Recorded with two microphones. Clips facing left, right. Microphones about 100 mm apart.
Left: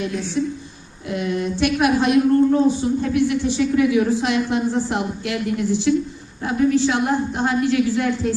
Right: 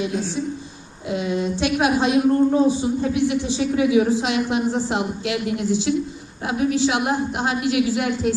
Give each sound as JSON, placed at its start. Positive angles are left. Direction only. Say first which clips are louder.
{"t": 1.1, "sound": "a woman's voice", "louder": "even", "side_deg": -20}